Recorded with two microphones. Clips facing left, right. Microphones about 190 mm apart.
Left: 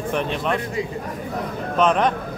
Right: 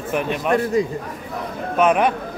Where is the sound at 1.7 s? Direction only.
10° right (ahead or behind).